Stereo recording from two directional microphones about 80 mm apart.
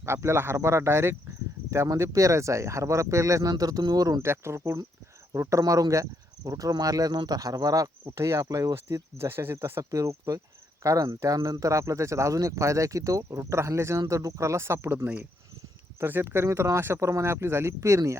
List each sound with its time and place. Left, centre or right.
0.0 s speech: right
3.5 s speech: right
4.2 s speech: right
8.1 s speech: right
8.7 s speech: right